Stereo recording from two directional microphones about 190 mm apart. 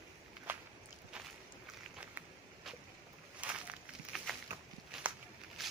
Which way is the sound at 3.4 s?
5° right (ahead or behind).